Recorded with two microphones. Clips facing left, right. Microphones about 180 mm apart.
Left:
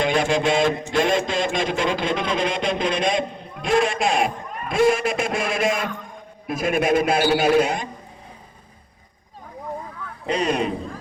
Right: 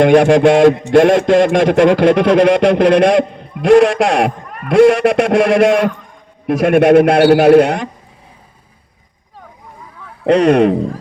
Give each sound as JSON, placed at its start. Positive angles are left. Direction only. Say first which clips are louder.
{"t": 0.0, "sound": "a man's voice", "louder": "right 12 dB", "side_deg": -70}
{"t": 10.2, "sound": "a man's voice", "louder": "right 13 dB", "side_deg": -75}